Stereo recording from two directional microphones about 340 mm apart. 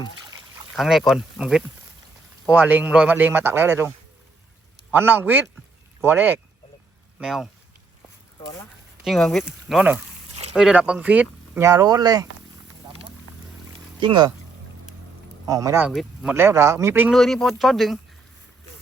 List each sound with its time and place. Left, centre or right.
0.8 s speech: centre
9.0 s speech: centre
12.8 s a sound: centre
14.0 s speech: centre
15.4 s speech: centre